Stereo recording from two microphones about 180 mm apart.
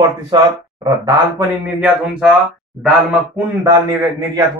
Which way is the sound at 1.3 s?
10° right (ahead or behind).